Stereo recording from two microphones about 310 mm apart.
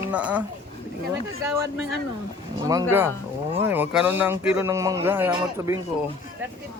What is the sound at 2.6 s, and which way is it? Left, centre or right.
Speech, centre.